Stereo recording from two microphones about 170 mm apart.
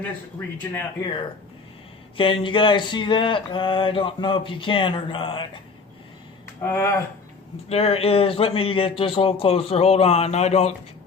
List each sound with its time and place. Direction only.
0.0 s speech: 10° left (ahead or behind)
2.1 s a sound: 30° left (ahead or behind)
6.6 s speech: 15° left (ahead or behind)
7.7 s speech: 35° left (ahead or behind)